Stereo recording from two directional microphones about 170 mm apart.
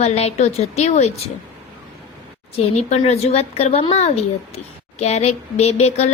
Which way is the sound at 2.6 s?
40° left (ahead or behind).